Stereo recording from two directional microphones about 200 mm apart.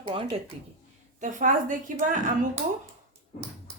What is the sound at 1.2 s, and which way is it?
Speech, 40° right (ahead or behind).